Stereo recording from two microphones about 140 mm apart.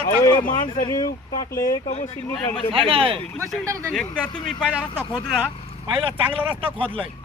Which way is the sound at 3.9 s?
5° left (ahead or behind).